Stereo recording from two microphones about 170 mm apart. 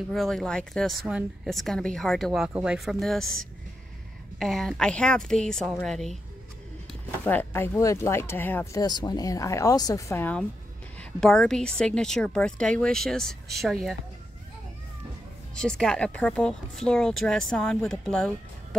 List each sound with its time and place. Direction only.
0.1 s speech: centre (ahead or behind)
4.4 s speech: centre (ahead or behind)
7.2 s speech: 10° left (ahead or behind)
8.8 s a woman's voice: 25° left (ahead or behind); by 13.9 s centre (ahead or behind)
15.5 s speech: 5° left (ahead or behind)